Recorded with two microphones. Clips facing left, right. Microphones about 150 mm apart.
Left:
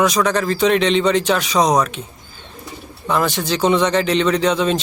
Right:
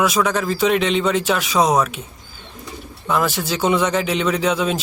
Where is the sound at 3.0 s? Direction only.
5° right (ahead or behind).